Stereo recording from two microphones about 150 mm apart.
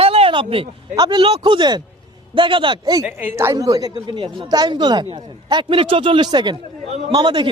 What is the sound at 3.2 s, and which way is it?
A woman's voice, 15° right (ahead or behind).